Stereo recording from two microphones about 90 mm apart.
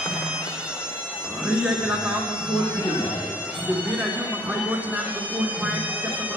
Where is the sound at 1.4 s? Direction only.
10° right (ahead or behind).